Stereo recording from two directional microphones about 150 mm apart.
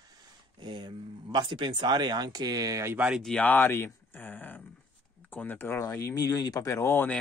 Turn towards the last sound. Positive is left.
turn(degrees=15)  # may be behind; listen again after turning